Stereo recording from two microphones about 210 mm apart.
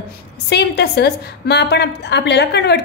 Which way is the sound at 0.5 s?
50° left (ahead or behind).